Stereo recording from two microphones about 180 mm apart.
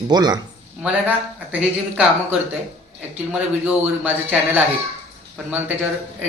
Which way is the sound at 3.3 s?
10° right (ahead or behind).